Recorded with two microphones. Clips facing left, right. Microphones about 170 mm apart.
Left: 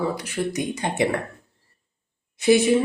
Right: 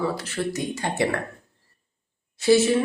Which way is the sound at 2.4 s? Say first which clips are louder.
Even; 20° left (ahead or behind).